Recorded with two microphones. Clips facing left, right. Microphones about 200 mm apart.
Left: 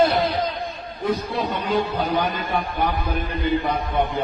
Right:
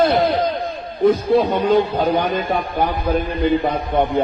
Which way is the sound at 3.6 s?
55° right (ahead or behind).